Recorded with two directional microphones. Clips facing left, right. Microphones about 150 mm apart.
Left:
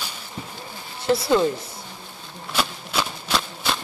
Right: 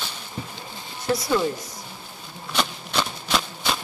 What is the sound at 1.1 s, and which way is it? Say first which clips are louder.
Speech: left 4 dB; 25° left (ahead or behind).